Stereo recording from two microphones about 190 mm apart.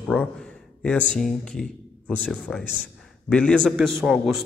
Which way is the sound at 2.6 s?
45° right (ahead or behind).